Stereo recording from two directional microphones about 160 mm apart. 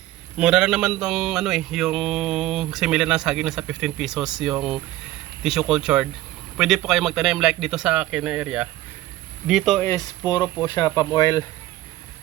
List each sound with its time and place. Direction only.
0.3 s mantra: 5° right (ahead or behind)
9.8 s speech: 25° left (ahead or behind)